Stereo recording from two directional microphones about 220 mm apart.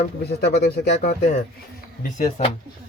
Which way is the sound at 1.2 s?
30° left (ahead or behind).